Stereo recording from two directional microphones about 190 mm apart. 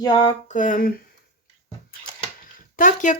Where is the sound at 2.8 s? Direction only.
45° left (ahead or behind).